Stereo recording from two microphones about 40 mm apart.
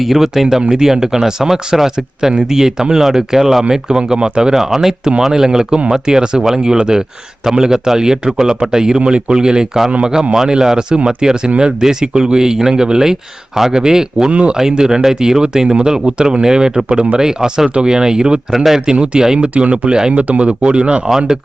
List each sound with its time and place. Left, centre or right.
0.0 s speech: centre
0.6 s speech: centre
9.0 s speech: right
14.3 s speech: right
14.5 s speech: centre
18.5 s speech: centre
18.9 s speech: right
20.2 s speech: right; by 21.3 s centre